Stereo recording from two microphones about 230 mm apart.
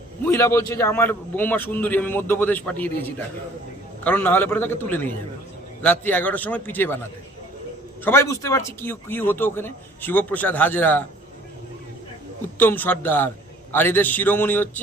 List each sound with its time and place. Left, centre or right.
0.3 s speech: centre
4.0 s speech: centre
8.0 s speech: centre
12.5 s speech: centre